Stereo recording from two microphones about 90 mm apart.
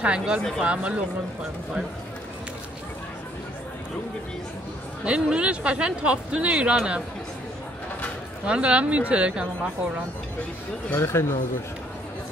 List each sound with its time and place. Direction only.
0.0 s speech: 15° right (ahead or behind)
5.0 s speech: 10° right (ahead or behind)
8.5 s speech: 10° right (ahead or behind)
10.9 s speech: 30° left (ahead or behind)